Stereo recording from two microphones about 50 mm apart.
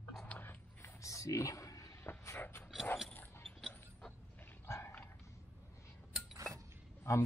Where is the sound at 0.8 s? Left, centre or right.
Left.